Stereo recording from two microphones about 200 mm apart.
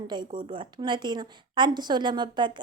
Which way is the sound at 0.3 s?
30° right (ahead or behind).